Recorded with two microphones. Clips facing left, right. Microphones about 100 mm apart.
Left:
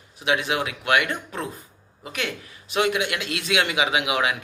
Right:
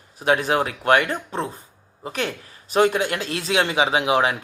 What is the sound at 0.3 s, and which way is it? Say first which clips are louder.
Speech: right 4 dB; 40° right (ahead or behind).